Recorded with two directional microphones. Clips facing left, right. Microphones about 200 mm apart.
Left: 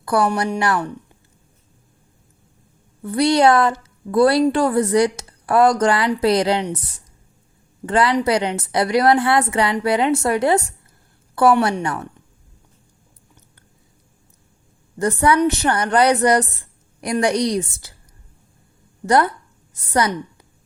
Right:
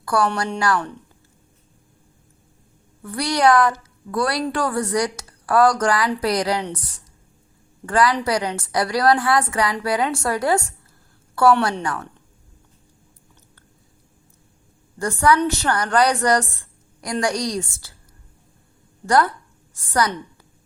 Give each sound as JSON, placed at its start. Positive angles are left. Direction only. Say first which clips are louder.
{"t": 0.0, "sound": "a woman's voice", "louder": "left 2 dB", "side_deg": 20}
{"t": 3.0, "sound": "a woman's voice", "louder": "left 4 dB", "side_deg": 25}
{"t": 7.9, "sound": "a woman's voice", "louder": "left 2 dB", "side_deg": 25}
{"t": 11.8, "sound": "a woman's voice", "louder": "left 2 dB", "side_deg": 25}
{"t": 14.9, "sound": "a woman's voice", "louder": "left 2 dB", "side_deg": 20}
{"t": 19.0, "sound": "a woman's voice", "louder": "left 2 dB", "side_deg": 20}